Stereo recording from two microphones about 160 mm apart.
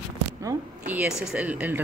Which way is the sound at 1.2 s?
5° right (ahead or behind).